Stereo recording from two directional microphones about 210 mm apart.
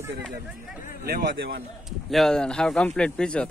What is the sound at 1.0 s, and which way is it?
Speech, 50° right (ahead or behind).